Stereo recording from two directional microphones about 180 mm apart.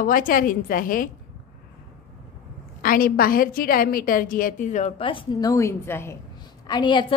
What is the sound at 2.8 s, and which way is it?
A woman's voice, 55° left (ahead or behind).